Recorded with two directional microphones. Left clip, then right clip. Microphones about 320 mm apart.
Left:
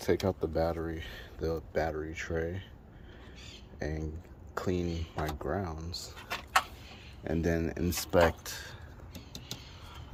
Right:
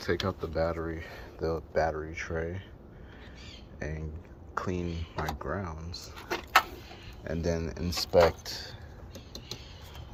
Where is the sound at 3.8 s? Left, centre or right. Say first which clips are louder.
Left 2 dB; centre.